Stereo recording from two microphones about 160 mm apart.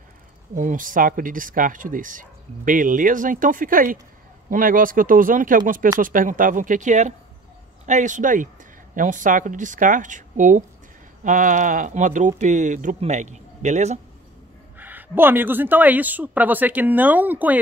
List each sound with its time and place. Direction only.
0.6 s speech: 55° right (ahead or behind)
14.8 s speech: 10° right (ahead or behind)